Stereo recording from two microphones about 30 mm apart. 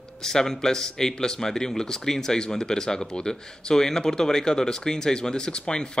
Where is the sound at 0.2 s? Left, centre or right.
Centre.